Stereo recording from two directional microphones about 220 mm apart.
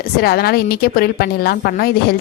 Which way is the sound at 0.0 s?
45° left (ahead or behind).